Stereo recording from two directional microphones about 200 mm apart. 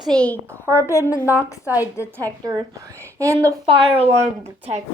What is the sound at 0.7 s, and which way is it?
Speech, 15° left (ahead or behind).